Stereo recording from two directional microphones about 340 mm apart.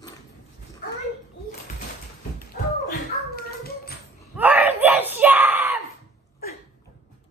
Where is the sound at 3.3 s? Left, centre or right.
Left.